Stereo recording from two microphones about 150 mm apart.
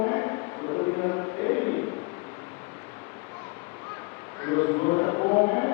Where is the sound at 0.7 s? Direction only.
30° left (ahead or behind).